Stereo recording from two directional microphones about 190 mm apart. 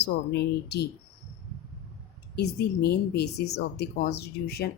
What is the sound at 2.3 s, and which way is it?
Speech, 60° left (ahead or behind).